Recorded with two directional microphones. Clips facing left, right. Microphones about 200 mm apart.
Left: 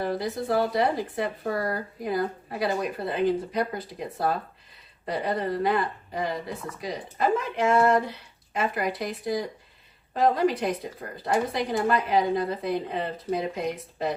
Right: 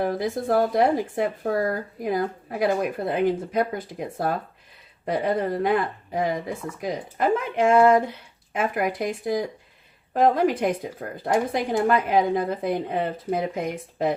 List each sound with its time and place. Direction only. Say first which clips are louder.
0.0 s speech: right 3 dB; 50° right (ahead or behind)